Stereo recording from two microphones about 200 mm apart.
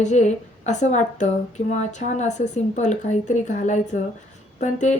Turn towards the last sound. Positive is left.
turn(degrees=35)  # may be behind; listen again after turning